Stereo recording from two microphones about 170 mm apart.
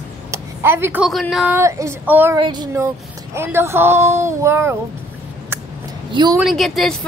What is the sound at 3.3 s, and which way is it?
Speech, 15° right (ahead or behind).